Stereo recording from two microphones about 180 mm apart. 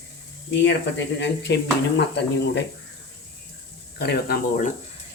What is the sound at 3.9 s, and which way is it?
Speech, 65° left (ahead or behind).